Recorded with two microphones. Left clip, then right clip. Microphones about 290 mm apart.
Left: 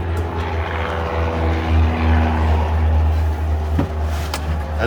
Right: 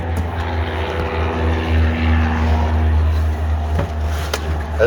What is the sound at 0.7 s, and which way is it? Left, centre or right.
Vehicle, centre.